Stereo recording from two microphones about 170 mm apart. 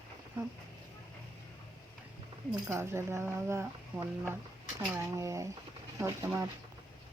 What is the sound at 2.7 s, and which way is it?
Speech, 15° right (ahead or behind).